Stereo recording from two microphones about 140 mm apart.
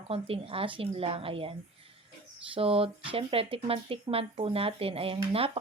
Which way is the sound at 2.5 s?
45° right (ahead or behind).